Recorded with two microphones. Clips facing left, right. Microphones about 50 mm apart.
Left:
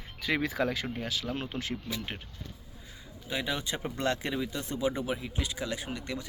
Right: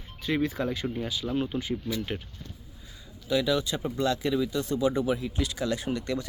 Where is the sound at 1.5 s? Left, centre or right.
Left.